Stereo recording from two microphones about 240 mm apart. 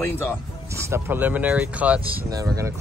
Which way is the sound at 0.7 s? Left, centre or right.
Centre.